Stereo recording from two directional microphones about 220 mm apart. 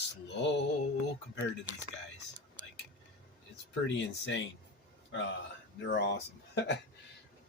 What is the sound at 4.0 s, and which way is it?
Speech, 55° left (ahead or behind).